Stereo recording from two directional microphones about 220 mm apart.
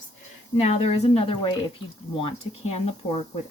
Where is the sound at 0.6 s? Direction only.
30° left (ahead or behind).